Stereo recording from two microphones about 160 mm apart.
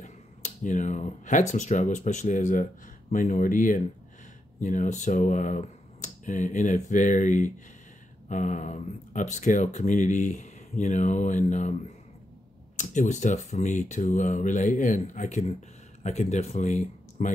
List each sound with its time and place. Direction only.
0.0 s speech: 50° left (ahead or behind)